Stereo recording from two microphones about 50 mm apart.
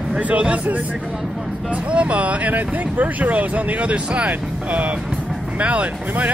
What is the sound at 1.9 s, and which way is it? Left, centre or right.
Speech, right.